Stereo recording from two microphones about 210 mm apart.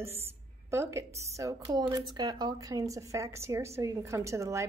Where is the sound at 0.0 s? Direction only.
10° right (ahead or behind).